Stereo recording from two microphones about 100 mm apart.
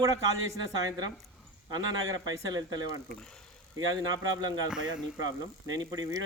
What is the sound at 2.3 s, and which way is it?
Speech, 40° right (ahead or behind).